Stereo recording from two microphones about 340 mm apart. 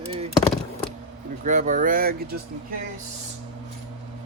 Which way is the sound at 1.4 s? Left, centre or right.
Right.